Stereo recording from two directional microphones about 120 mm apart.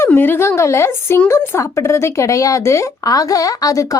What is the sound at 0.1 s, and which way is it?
Speech, 15° left (ahead or behind).